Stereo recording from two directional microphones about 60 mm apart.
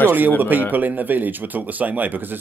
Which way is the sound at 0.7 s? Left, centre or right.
Right.